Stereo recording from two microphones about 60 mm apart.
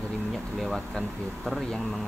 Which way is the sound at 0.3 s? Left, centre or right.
Centre.